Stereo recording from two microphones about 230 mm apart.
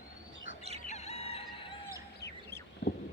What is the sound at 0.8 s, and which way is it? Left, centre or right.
Fowl, left.